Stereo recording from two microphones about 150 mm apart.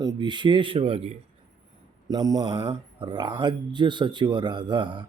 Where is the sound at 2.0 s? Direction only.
25° right (ahead or behind).